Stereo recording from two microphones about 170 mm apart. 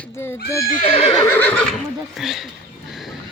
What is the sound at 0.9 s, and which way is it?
Neigh, 30° left (ahead or behind).